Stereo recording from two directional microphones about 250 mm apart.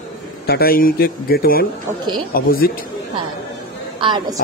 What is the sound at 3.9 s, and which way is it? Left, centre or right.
Speech, centre.